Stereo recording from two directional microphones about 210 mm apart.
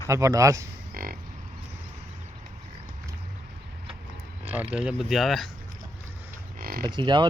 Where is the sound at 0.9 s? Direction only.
45° right (ahead or behind).